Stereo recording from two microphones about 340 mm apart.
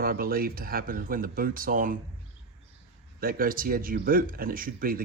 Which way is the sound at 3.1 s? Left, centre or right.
Right.